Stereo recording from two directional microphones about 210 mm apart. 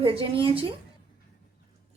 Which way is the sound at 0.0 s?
25° right (ahead or behind).